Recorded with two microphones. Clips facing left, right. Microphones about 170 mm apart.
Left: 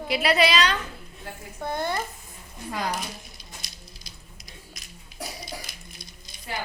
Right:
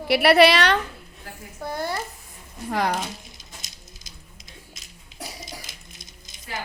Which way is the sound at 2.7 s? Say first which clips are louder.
Right 5 dB; 65° right (ahead or behind).